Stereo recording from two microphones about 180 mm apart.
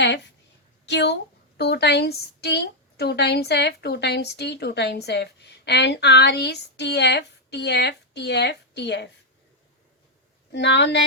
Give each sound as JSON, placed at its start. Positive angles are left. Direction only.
{"t": 0.9, "sound": "a woman's voice", "side_deg": 70}
{"t": 10.5, "sound": "a woman's voice", "side_deg": 70}